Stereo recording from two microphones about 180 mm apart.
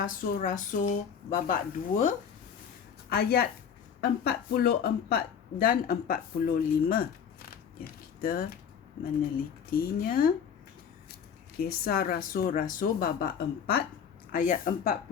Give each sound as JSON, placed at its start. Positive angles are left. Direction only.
{"t": 0.0, "sound": "speech", "side_deg": 45}
{"t": 3.1, "sound": "speech", "side_deg": 60}
{"t": 8.2, "sound": "speech", "side_deg": 55}
{"t": 9.6, "sound": "speech", "side_deg": 55}
{"t": 11.6, "sound": "speech", "side_deg": 55}
{"t": 14.3, "sound": "speech", "side_deg": 50}